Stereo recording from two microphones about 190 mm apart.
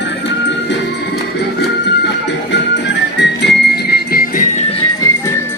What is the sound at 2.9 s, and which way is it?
Music, 65° left (ahead or behind).